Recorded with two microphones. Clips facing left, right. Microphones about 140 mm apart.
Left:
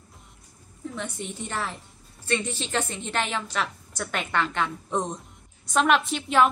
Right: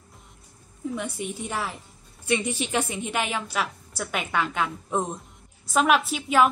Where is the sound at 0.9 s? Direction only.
10° right (ahead or behind).